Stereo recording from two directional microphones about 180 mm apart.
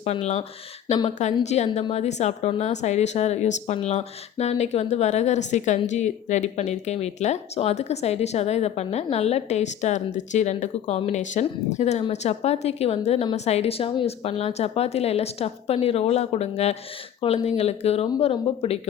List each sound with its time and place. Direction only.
0.0 s speech: 35° left (ahead or behind)